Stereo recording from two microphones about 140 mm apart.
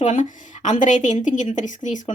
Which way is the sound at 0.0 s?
60° left (ahead or behind).